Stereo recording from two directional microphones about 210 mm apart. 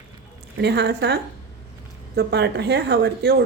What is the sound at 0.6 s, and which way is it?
Speech, 50° right (ahead or behind).